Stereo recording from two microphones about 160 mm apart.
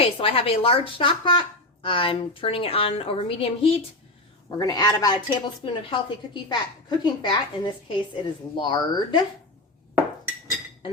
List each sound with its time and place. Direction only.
0.0 s a woman's voice: 35° left (ahead or behind)
4.5 s a woman's voice: 25° left (ahead or behind)